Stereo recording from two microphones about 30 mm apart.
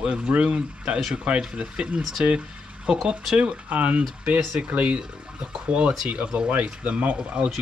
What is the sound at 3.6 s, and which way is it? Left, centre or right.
Speech, right.